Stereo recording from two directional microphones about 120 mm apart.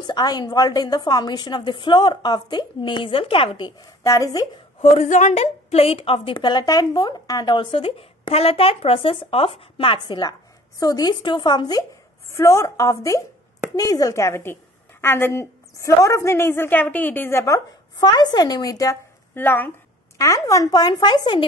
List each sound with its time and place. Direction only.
0.0 s a woman's voice: 35° left (ahead or behind)
4.0 s a woman's voice: 25° left (ahead or behind)
4.9 s a woman's voice: 80° left; by 11.8 s 35° left (ahead or behind)
12.4 s a woman's voice: 25° left (ahead or behind)
17.9 s a woman's voice: 35° left (ahead or behind)
19.3 s speech: 15° left (ahead or behind)
20.2 s a woman's voice: 25° left (ahead or behind)